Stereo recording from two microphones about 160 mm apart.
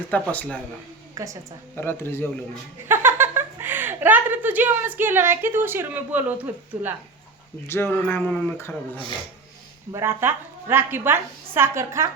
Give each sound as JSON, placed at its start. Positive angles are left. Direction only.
{"t": 0.1, "sound": "speech", "side_deg": 10}
{"t": 1.1, "sound": "a woman's voice", "side_deg": -20}
{"t": 1.7, "sound": "speech", "side_deg": 15}
{"t": 2.8, "sound": "speech", "side_deg": -15}
{"t": 7.7, "sound": "speech", "side_deg": 15}
{"t": 9.9, "sound": "a woman's voice", "side_deg": -15}